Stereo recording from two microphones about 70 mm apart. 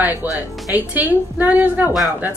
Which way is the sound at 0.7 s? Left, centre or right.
Right.